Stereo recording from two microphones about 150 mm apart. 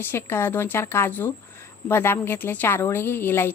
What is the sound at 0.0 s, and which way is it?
A woman's voice, 15° left (ahead or behind).